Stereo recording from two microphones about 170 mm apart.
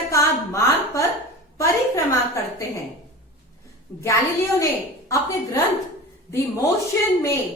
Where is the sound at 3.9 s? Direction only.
15° left (ahead or behind).